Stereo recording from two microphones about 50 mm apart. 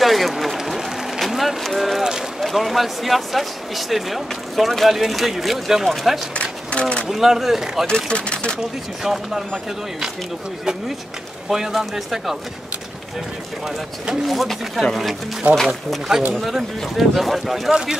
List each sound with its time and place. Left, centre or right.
0.0 s a man's voice: centre
6.3 s speech: left
7.1 s speech: centre
7.8 s speech: centre
8.5 s speech: centre
11.4 s speech: centre
14.2 s speech: centre